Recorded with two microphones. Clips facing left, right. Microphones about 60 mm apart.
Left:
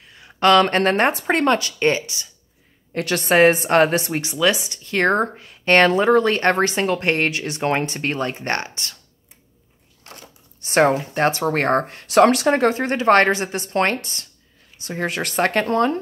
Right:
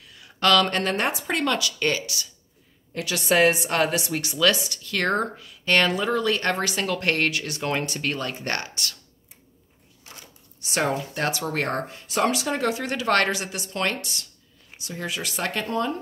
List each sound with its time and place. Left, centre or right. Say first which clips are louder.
0.0 s speech: left 6 dB; left
2.9 s speech: left 4 dB; left
4.2 s speech: right 1 dB; left
10.6 s speech: left 8 dB; left